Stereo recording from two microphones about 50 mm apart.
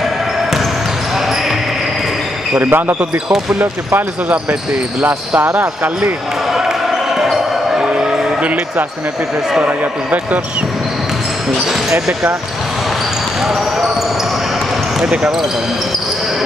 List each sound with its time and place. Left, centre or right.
2.6 s speech: right
3.5 s speech: right
7.2 s basketball bounce: centre; by 8.8 s right
9.6 s speech: right
15.0 s speech: centre